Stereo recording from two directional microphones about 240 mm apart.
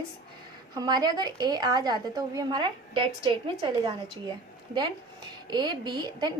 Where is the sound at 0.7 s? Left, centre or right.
Centre.